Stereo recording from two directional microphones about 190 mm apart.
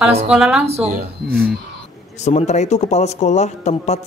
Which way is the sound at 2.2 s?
35° left (ahead or behind).